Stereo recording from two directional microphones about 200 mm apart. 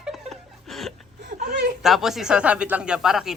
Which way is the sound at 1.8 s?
Centre (ahead or behind).